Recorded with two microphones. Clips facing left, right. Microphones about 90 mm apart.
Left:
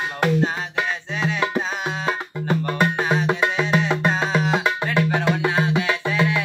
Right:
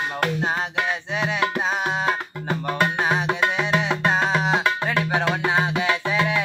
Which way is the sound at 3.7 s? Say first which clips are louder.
Even; 15° right (ahead or behind).